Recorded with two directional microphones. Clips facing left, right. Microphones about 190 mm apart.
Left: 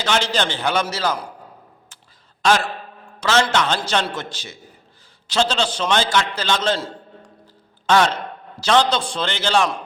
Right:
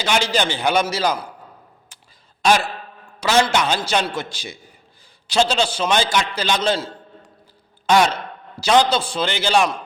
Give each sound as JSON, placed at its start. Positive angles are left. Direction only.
{"t": 0.0, "sound": "a man's voice", "side_deg": -10}
{"t": 2.4, "sound": "a man's voice", "side_deg": -15}